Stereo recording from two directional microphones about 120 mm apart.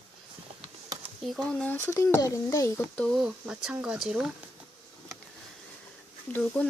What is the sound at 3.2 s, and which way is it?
Speech, 5° right (ahead or behind).